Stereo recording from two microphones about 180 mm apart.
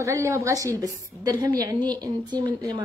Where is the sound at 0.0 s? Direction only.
15° right (ahead or behind).